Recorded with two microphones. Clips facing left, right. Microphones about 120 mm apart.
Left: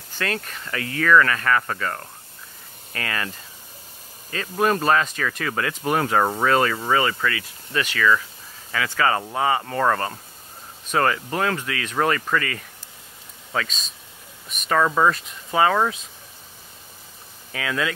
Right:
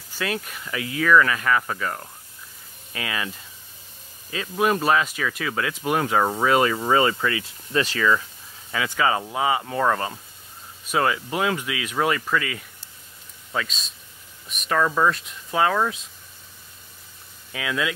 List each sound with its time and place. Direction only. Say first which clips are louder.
0.1 s speech: even; 10° right (ahead or behind)
6.4 s speech: even; 15° right (ahead or behind); by 8.1 s 30° right (ahead or behind)
8.7 s speech: left 1 dB; 15° right (ahead or behind); by 15.8 s centre (ahead or behind)
17.5 s speech: left 1 dB; 5° right (ahead or behind)